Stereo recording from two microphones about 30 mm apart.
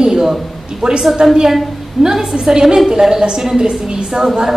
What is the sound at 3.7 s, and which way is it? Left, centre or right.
Speech, right.